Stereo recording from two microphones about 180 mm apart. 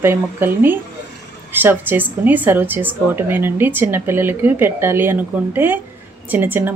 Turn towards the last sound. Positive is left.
turn(degrees=-10)  # may be behind; listen again after turning